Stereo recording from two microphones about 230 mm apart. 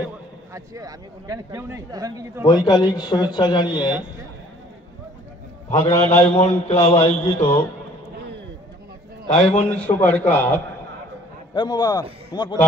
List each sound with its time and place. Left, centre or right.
0.5 s a man's voice: centre
2.4 s speech: centre
5.8 s speech: centre
6.0 s a man's voice: left
7.3 s speech: centre
9.4 s a man's voice: centre